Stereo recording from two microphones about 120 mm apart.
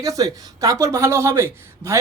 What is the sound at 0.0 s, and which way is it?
Speech, 30° right (ahead or behind).